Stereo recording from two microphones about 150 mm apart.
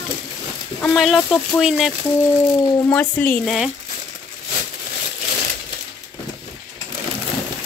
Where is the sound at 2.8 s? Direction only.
10° left (ahead or behind).